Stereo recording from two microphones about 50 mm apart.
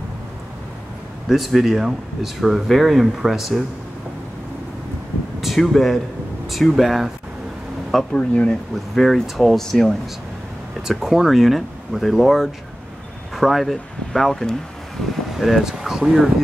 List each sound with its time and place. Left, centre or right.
1.3 s speech: centre
5.4 s speech: centre
7.9 s speech: centre
8.2 s speech: left
8.9 s speech: centre
9.6 s speech: centre
10.9 s speech: centre
15.3 s speech: centre